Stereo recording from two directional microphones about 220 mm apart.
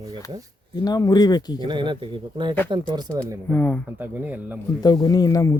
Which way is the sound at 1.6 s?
20° right (ahead or behind).